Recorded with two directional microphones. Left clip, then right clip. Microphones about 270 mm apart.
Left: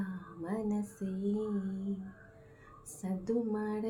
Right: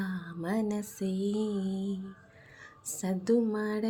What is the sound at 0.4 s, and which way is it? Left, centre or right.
Music, right.